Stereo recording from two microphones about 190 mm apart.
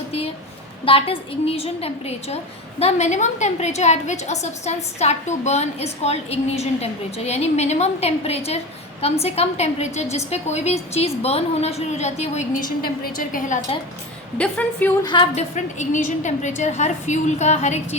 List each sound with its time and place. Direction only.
0.9 s a woman's voice: 30° left (ahead or behind); by 13.6 s 45° left (ahead or behind)
14.3 s a woman's voice: 5° left (ahead or behind)
15.0 s a woman's voice: 25° left (ahead or behind)
15.5 s a woman's voice: 40° left (ahead or behind)